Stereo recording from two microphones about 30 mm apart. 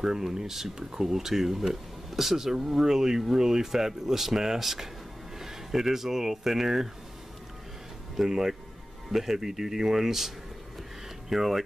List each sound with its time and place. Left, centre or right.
0.0 s speech: centre
8.2 s speech: centre